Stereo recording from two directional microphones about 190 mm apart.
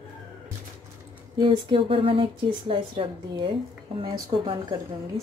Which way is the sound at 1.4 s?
25° right (ahead or behind).